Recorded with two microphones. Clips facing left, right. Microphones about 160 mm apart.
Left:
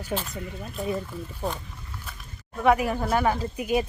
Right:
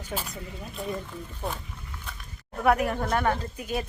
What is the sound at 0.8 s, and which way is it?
Speech, centre (ahead or behind).